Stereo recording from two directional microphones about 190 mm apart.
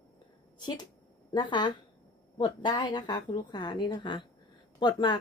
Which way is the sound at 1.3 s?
25° left (ahead or behind).